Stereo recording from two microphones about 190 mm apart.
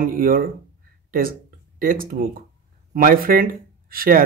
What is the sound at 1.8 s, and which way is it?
Speech, 50° right (ahead or behind).